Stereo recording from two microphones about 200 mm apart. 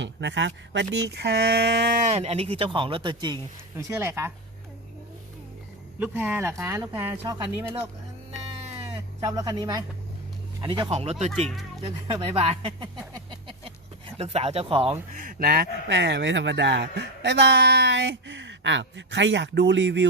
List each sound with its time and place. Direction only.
0.0 s speech: 65° right (ahead or behind)
2.0 s speech: 35° right (ahead or behind); by 4.3 s 10° right (ahead or behind)
6.0 s speech: 10° right (ahead or behind)
9.2 s speech: 20° right (ahead or behind)
11.3 s speech: centre (ahead or behind)
11.8 s speech: 25° right (ahead or behind)
15.2 s speech: 45° right (ahead or behind); by 20.1 s 60° right (ahead or behind)